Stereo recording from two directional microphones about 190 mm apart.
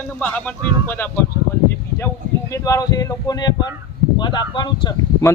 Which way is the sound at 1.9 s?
15° left (ahead or behind).